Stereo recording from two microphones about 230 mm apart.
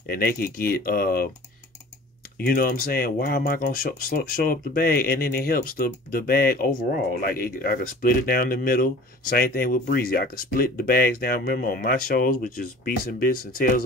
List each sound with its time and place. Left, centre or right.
0.1 s speech: left
2.3 s speech: left